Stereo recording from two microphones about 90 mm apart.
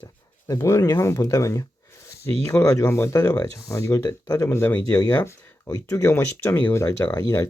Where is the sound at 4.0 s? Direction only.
50° left (ahead or behind).